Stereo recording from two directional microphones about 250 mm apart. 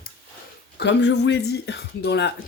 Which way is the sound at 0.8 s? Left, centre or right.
Left.